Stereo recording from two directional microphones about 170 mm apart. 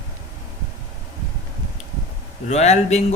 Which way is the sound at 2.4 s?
40° left (ahead or behind).